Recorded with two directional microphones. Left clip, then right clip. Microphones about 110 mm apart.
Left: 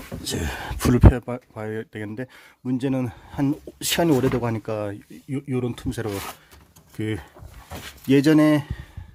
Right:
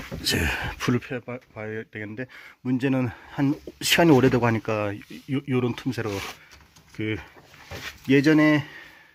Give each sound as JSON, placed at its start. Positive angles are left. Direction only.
{"t": 0.2, "sound": "speech", "side_deg": 0}
{"t": 0.8, "sound": "speech", "side_deg": 40}
{"t": 2.6, "sound": "speech", "side_deg": 5}
{"t": 4.1, "sound": "speech", "side_deg": -10}
{"t": 5.9, "sound": "speech", "side_deg": 15}
{"t": 6.9, "sound": "speech", "side_deg": 35}